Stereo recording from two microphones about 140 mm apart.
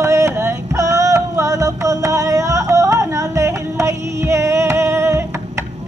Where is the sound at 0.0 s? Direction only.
20° right (ahead or behind).